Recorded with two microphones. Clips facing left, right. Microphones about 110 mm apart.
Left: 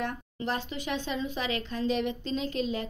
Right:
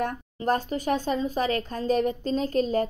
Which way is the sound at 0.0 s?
45° right (ahead or behind).